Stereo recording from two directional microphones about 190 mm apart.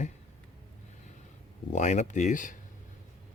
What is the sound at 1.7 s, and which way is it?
Speech, 40° left (ahead or behind).